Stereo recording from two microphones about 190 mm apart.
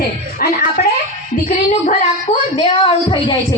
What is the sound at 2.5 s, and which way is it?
Speech, 30° left (ahead or behind).